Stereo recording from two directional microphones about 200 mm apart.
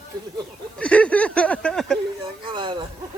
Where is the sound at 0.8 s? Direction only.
5° left (ahead or behind).